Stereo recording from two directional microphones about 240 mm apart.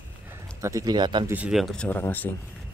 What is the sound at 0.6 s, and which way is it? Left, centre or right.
Speech, centre.